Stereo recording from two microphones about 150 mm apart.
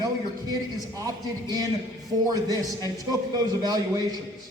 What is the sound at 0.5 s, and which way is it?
A man's voice, 25° right (ahead or behind).